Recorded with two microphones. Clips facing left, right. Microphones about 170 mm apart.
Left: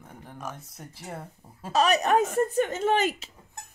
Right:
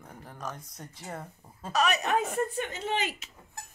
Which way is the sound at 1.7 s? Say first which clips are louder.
Left 5 dB; 40° left (ahead or behind).